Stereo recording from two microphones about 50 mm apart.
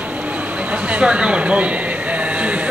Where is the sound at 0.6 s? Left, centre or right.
Right.